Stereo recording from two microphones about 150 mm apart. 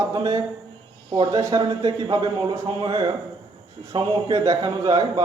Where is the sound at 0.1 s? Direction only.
25° right (ahead or behind).